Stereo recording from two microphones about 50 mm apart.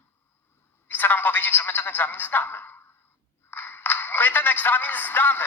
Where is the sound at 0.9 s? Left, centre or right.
Left.